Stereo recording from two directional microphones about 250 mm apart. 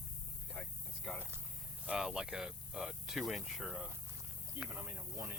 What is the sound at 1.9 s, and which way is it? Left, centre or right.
Speech, centre.